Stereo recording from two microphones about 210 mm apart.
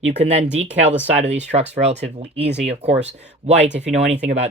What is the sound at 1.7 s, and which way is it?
Speech, 30° right (ahead or behind).